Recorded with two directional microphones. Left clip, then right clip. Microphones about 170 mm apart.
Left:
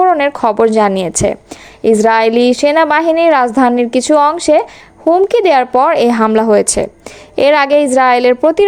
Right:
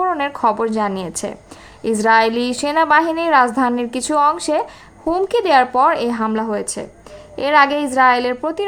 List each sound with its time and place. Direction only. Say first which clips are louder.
0.0 s a woman's voice: left 7 dB; 35° left (ahead or behind)